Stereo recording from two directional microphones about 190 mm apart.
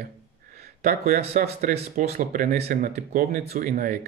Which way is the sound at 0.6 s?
50° right (ahead or behind).